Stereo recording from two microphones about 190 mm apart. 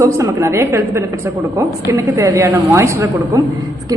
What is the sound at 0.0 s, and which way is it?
A woman's voice, 15° right (ahead or behind).